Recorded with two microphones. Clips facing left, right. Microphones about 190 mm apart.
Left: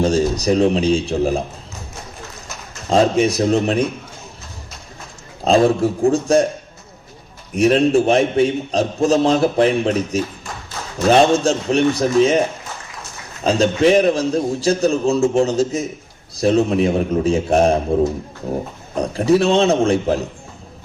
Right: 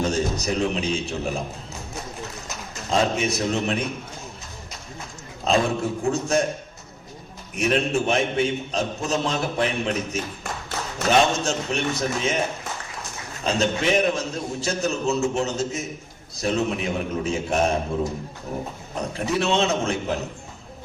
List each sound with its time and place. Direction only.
0.0 s a man's voice: 35° left (ahead or behind)
2.9 s a man's voice: 35° left (ahead or behind)
5.5 s a man's voice: 35° left (ahead or behind)
7.5 s a man's voice: 35° left (ahead or behind)
13.4 s a man's voice: 35° left (ahead or behind)
18.9 s a man's voice: 35° left (ahead or behind)